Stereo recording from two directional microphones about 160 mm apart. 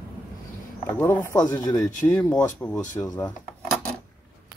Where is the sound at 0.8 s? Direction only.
15° left (ahead or behind).